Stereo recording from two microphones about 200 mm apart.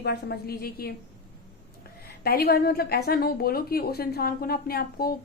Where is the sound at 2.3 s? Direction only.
50° left (ahead or behind).